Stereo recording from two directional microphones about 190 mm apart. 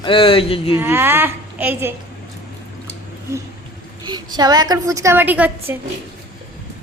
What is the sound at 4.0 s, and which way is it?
A woman's voice, 20° right (ahead or behind).